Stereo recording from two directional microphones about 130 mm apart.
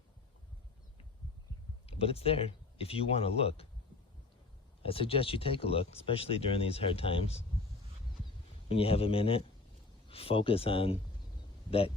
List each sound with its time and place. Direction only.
1.9 s speech: 50° left (ahead or behind)
4.8 s speech: 45° left (ahead or behind)
8.7 s speech: 50° left (ahead or behind)